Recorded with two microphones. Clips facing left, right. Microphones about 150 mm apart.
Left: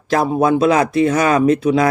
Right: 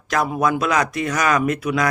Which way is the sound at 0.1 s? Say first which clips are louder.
Left 5 dB; 30° left (ahead or behind).